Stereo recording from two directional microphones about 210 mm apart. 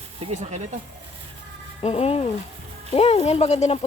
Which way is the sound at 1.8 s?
30° left (ahead or behind).